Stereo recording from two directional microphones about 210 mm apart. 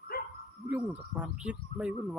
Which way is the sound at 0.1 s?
45° left (ahead or behind).